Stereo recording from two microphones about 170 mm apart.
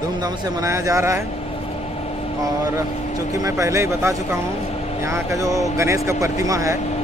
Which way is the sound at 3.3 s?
20° right (ahead or behind).